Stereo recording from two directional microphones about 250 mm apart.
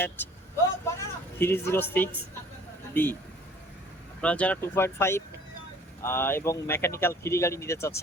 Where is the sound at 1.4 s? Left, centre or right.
Centre.